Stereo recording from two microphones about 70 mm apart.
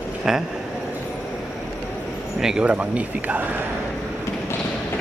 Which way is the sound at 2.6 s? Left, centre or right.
Centre.